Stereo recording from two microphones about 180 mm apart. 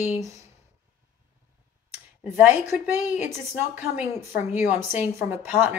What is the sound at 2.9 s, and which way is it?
A woman's voice, 15° right (ahead or behind).